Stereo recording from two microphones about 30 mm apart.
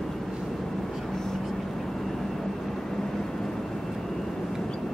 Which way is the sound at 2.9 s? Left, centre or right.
Centre.